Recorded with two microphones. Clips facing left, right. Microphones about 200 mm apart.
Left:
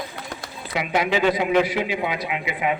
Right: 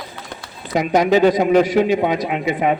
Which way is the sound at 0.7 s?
40° right (ahead or behind).